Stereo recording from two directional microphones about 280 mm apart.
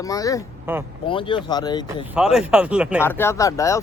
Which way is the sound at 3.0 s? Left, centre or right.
Centre.